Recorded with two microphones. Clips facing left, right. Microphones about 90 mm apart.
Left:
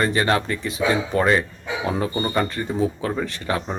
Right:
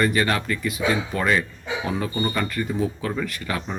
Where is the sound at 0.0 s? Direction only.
30° left (ahead or behind).